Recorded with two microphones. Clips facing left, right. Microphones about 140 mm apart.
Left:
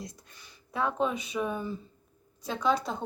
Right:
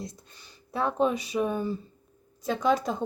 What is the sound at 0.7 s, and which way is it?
Speech, 35° right (ahead or behind).